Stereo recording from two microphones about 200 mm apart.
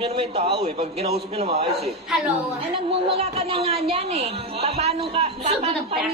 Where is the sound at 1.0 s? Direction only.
30° right (ahead or behind).